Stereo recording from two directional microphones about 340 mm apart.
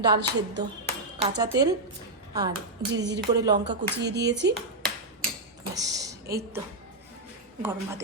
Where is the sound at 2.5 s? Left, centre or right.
Right.